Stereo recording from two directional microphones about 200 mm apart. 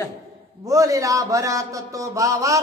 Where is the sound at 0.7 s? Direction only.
15° right (ahead or behind).